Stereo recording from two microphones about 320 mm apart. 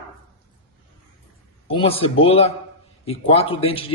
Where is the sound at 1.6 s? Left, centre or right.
Centre.